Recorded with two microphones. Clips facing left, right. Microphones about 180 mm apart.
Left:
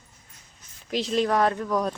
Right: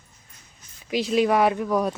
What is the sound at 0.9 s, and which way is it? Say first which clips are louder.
Speech: right 3 dB; 5° right (ahead or behind).